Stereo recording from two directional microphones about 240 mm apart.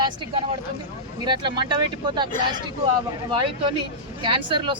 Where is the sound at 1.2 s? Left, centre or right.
Centre.